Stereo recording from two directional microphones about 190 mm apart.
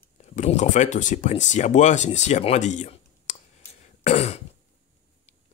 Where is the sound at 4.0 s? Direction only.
35° left (ahead or behind).